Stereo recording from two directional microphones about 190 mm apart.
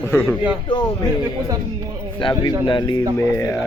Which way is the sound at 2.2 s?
25° left (ahead or behind).